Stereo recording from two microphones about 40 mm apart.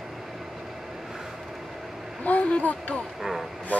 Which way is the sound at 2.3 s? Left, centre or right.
Left.